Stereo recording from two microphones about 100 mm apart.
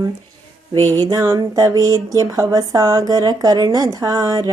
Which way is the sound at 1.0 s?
35° right (ahead or behind).